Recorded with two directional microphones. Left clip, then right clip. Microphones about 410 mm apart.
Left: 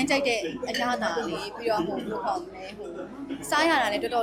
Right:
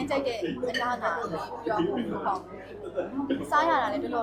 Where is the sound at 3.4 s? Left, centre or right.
Left.